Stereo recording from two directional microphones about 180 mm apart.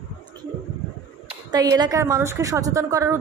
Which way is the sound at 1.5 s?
20° right (ahead or behind).